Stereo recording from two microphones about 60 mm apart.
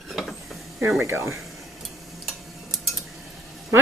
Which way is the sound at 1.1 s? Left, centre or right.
Right.